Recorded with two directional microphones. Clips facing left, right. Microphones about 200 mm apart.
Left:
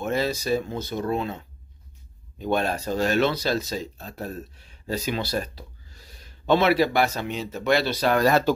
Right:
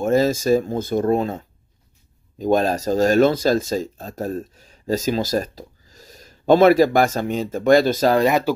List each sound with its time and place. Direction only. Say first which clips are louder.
0.0 s speech: right 8 dB; 45° right (ahead or behind)
8.3 s speech: right 1 dB; 15° right (ahead or behind)